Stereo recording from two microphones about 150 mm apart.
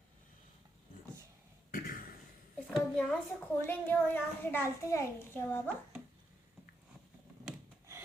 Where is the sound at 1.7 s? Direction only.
75° left (ahead or behind).